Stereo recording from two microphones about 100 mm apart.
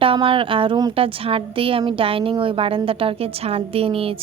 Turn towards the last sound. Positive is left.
turn(degrees=-70)  # may be behind; listen again after turning